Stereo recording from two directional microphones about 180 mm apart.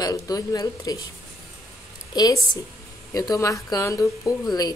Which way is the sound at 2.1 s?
20° left (ahead or behind).